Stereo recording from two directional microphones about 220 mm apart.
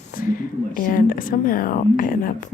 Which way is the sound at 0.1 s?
40° left (ahead or behind).